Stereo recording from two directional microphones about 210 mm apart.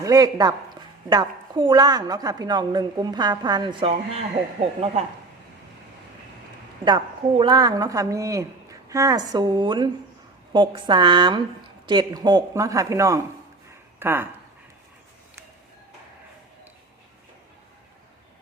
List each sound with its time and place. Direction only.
0.0 s a woman's voice: 15° right (ahead or behind)
6.8 s a woman's voice: 20° right (ahead or behind)